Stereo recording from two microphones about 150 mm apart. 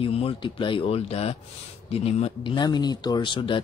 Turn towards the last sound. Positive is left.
turn(degrees=35)  # may be behind; listen again after turning